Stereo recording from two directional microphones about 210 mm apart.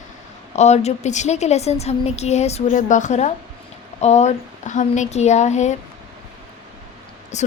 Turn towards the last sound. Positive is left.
turn(degrees=35)  # may be behind; listen again after turning